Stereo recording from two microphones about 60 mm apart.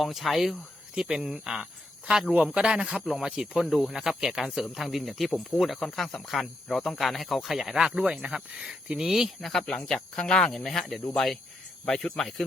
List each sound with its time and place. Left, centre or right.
0.0 s speech: centre
3.0 s speech: centre
9.5 s speech: centre